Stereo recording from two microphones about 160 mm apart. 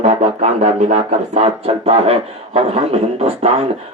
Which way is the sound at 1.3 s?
40° right (ahead or behind).